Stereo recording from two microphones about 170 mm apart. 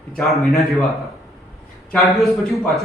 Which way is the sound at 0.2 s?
Centre (ahead or behind).